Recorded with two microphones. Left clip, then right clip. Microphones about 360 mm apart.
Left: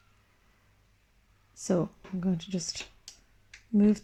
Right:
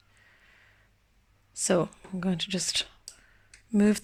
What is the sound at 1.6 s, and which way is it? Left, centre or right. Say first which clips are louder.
Speech: right 4 dB; right.